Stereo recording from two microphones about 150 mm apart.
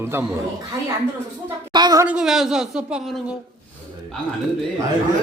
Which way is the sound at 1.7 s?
25° right (ahead or behind).